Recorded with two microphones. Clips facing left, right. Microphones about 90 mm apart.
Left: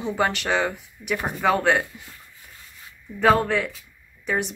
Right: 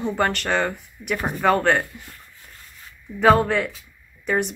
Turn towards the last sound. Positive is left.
turn(degrees=0)  # may be behind; listen again after turning